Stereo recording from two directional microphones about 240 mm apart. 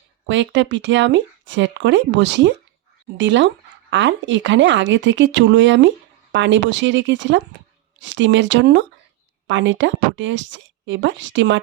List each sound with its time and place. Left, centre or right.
0.3 s speech: right